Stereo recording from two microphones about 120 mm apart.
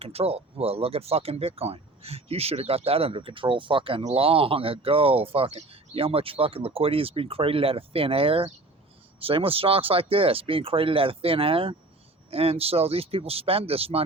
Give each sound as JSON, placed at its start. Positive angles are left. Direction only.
{"t": 0.0, "sound": "speech", "side_deg": -55}